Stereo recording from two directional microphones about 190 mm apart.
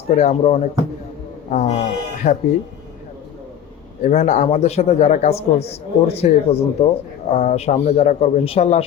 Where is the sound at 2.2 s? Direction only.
40° left (ahead or behind).